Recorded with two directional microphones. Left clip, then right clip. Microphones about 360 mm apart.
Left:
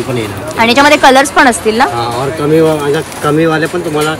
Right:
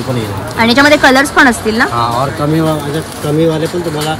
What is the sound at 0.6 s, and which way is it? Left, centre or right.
Speech, centre.